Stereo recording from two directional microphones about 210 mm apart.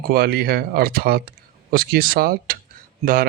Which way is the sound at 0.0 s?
45° right (ahead or behind).